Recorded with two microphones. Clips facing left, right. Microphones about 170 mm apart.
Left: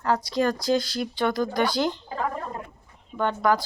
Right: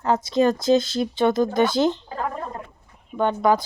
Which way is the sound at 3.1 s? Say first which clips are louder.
Right 3 dB; 20° right (ahead or behind).